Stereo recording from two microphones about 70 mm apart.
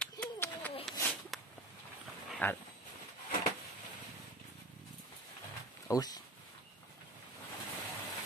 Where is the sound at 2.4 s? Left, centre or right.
Left.